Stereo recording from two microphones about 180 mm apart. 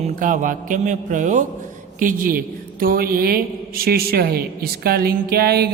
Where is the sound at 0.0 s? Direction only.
45° right (ahead or behind).